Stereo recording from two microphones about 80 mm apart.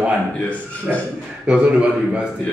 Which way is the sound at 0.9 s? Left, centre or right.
Centre.